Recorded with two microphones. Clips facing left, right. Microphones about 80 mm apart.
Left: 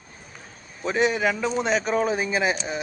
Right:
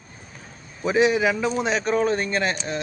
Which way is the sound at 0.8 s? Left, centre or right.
Centre.